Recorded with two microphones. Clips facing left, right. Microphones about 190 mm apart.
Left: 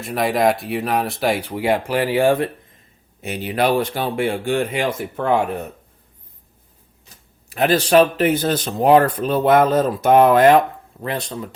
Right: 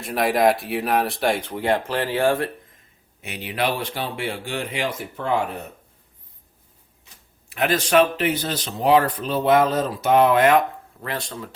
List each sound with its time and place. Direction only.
0.0 s speech: centre (ahead or behind); by 2.5 s 15° left (ahead or behind)
3.2 s speech: 40° left (ahead or behind)
7.5 s speech: 35° left (ahead or behind)
11.0 s speech: 20° left (ahead or behind)